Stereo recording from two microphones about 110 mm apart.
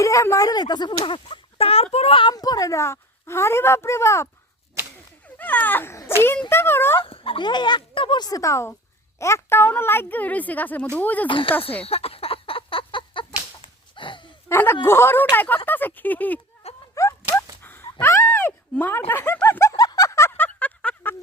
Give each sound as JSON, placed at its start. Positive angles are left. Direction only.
{"t": 0.0, "sound": "speech", "side_deg": 30}
{"t": 2.3, "sound": "speech", "side_deg": 35}
{"t": 5.4, "sound": "dog", "side_deg": 15}
{"t": 6.0, "sound": "speech", "side_deg": 20}
{"t": 7.0, "sound": "speech", "side_deg": 55}
{"t": 11.3, "sound": "speech", "side_deg": 50}
{"t": 11.9, "sound": "a sound", "side_deg": 65}
{"t": 14.5, "sound": "speech", "side_deg": 20}
{"t": 16.9, "sound": "a sound", "side_deg": 30}
{"t": 18.0, "sound": "speech", "side_deg": 20}
{"t": 19.7, "sound": "a sound", "side_deg": 35}